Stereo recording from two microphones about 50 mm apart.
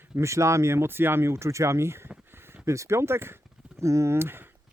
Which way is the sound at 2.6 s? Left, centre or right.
Right.